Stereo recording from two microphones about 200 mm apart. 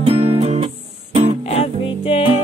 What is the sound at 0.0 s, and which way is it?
Music, 30° right (ahead or behind).